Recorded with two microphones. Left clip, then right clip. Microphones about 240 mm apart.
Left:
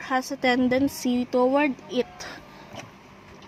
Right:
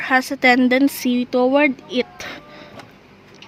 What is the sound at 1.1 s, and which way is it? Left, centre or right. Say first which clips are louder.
Speech: right 4 dB; centre.